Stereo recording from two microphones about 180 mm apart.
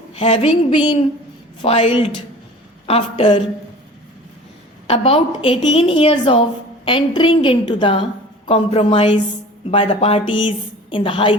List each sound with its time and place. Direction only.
0.1 s a woman's voice: 30° left (ahead or behind)
4.9 s a woman's voice: 30° left (ahead or behind)